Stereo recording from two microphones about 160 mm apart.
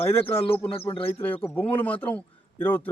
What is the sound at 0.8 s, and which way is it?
Speech, 35° left (ahead or behind).